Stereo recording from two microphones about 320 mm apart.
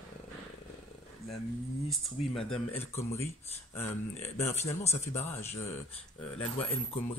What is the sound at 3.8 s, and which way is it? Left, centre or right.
Speech, centre.